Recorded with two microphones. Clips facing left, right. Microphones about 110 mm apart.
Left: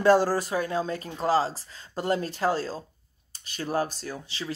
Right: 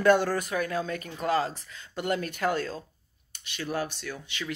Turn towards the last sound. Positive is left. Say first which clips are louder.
# left 1 dB
turn(degrees=30)  # may be behind; listen again after turning